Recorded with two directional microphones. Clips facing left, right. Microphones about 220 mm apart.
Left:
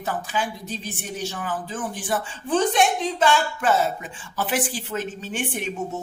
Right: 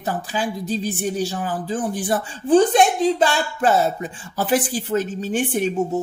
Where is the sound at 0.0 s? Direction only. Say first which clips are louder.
Right 3 dB; 35° right (ahead or behind).